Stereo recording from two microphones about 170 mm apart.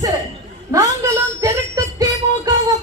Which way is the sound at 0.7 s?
20° right (ahead or behind).